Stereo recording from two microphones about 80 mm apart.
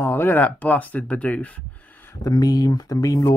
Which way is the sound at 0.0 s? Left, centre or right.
Left.